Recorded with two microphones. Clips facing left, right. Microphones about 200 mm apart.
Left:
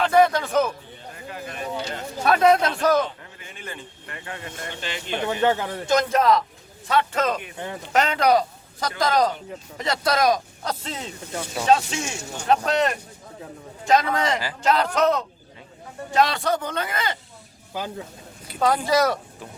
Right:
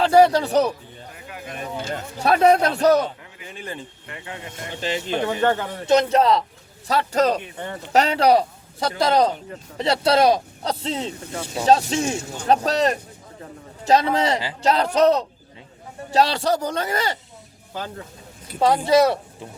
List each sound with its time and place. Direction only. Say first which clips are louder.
0.0 s speech: right 3 dB; 35° right (ahead or behind)
2.3 s speech: right 2 dB; 30° right (ahead or behind)
5.2 s speech: left 1 dB; 5° left (ahead or behind)
5.9 s a man's voice: right 3 dB; 30° right (ahead or behind)
17.7 s speech: left 1 dB; 10° left (ahead or behind)
18.6 s a man's voice: right 4 dB; 30° right (ahead or behind)